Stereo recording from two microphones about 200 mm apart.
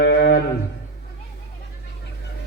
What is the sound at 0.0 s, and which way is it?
Music, 55° left (ahead or behind).